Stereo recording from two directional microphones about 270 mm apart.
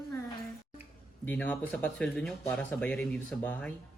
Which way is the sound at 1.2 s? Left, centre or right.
Centre.